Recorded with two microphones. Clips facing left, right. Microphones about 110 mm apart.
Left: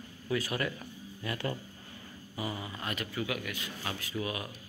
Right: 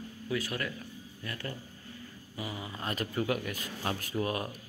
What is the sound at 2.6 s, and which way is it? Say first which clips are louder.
Speech: right 1 dB; 25° right (ahead or behind).